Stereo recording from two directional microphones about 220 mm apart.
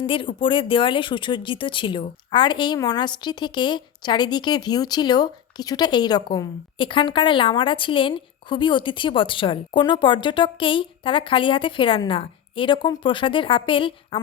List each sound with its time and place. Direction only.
0.0 s speech: 25° left (ahead or behind)